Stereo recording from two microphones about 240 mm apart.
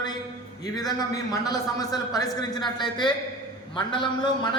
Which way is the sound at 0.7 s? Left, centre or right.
Centre.